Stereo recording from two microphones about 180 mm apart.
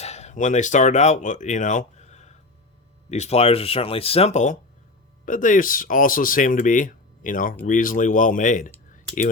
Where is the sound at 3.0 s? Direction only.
40° left (ahead or behind).